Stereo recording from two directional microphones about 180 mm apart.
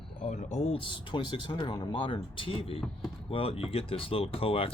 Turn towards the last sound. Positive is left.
turn(degrees=30)  # may be behind; listen again after turning